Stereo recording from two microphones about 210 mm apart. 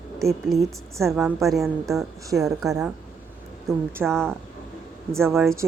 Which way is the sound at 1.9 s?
15° right (ahead or behind).